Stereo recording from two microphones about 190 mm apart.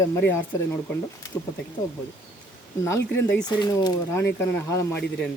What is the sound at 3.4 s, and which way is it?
Speech, 20° left (ahead or behind).